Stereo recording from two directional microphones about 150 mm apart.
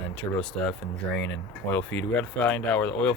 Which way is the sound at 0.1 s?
10° left (ahead or behind).